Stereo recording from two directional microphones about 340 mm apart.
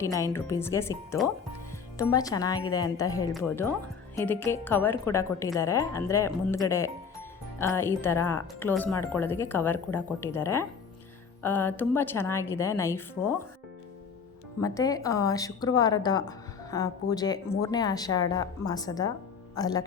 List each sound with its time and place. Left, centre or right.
0.1 s a woman's voice: centre
14.6 s a woman's voice: centre